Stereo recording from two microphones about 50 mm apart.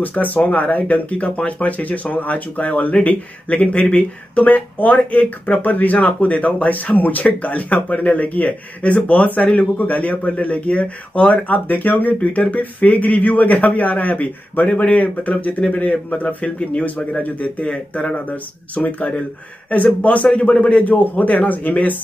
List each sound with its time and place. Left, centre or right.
0.0 s a man's voice: left
20.2 s a man's voice: centre
20.9 s speech: left